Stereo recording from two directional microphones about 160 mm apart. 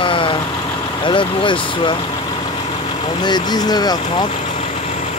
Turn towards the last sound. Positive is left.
turn(degrees=25)  # may be behind; listen again after turning